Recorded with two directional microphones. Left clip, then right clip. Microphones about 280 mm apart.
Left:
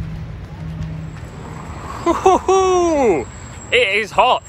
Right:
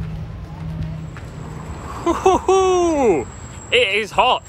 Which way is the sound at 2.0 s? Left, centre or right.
Centre.